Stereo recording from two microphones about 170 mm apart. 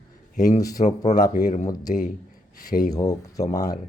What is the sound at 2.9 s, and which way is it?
Speech, 20° left (ahead or behind).